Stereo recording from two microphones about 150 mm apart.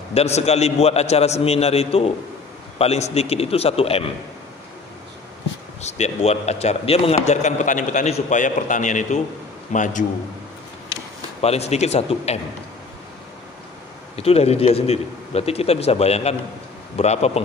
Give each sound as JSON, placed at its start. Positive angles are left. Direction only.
{"t": 0.1, "sound": "a man's voice", "side_deg": 45}
{"t": 5.8, "sound": "a man's voice", "side_deg": 50}
{"t": 7.2, "sound": "a man's voice", "side_deg": 55}
{"t": 11.4, "sound": "a man's voice", "side_deg": 45}
{"t": 14.1, "sound": "a man's voice", "side_deg": 45}